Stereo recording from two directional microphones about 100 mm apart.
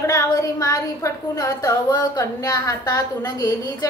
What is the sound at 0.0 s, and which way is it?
A woman's voice, 35° left (ahead or behind).